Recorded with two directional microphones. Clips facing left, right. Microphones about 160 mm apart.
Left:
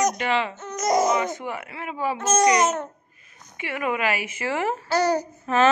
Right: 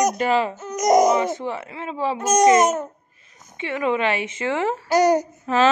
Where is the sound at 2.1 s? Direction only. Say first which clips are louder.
Right 4 dB; 15° right (ahead or behind).